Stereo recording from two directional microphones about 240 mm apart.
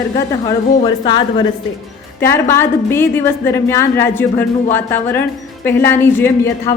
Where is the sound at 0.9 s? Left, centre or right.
Centre.